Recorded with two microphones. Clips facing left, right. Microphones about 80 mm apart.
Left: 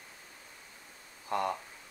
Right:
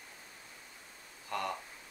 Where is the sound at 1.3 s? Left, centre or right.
Left.